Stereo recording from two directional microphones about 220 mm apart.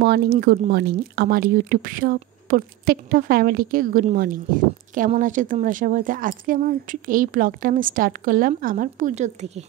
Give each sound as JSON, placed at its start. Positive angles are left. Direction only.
{"t": 0.0, "sound": "speech", "side_deg": -45}